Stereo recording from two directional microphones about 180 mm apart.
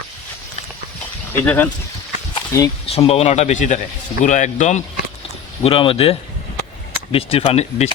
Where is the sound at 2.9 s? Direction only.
35° left (ahead or behind).